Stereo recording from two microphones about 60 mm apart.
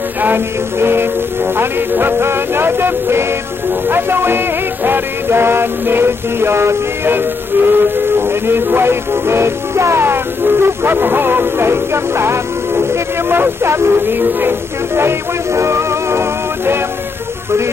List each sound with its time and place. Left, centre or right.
0.2 s music: right
15.0 s music: right